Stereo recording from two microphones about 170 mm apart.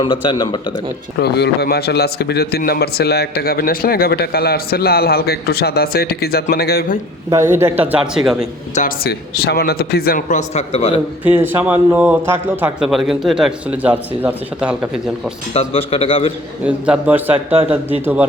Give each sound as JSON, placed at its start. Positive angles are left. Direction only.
{"t": 0.0, "sound": "speech", "side_deg": 30}
{"t": 1.2, "sound": "a man's voice", "side_deg": 70}
{"t": 7.3, "sound": "a man's voice", "side_deg": -15}
{"t": 9.0, "sound": "a man's voice", "side_deg": 70}
{"t": 11.2, "sound": "a man's voice", "side_deg": -10}
{"t": 15.5, "sound": "a man's voice", "side_deg": 35}
{"t": 16.6, "sound": "a man's voice", "side_deg": -5}